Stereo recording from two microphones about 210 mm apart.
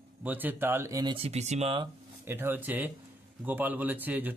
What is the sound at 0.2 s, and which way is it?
Speech, 10° right (ahead or behind).